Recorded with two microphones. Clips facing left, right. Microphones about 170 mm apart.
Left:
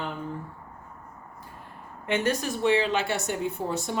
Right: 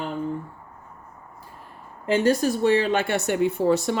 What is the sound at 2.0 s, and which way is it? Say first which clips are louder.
Speech: right 6 dB; 30° right (ahead or behind).